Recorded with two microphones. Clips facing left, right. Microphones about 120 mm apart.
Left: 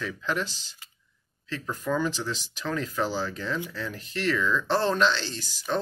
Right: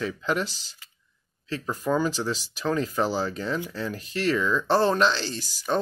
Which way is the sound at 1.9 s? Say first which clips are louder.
Right 3 dB; 25° right (ahead or behind).